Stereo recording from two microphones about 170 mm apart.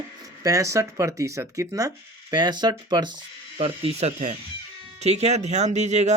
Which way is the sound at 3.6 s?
35° right (ahead or behind).